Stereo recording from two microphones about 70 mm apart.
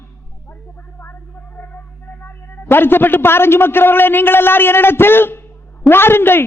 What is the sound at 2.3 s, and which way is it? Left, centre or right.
A man's voice, left.